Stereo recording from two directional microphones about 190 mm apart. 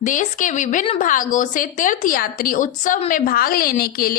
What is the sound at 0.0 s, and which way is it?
A woman's voice, 45° left (ahead or behind).